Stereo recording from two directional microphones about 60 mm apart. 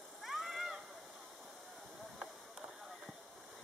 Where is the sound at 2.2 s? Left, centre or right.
Centre.